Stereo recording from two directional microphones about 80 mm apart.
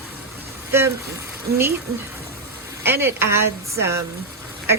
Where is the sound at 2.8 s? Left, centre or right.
Right.